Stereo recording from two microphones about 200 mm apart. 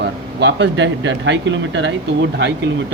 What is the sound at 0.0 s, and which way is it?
Speech, 65° right (ahead or behind).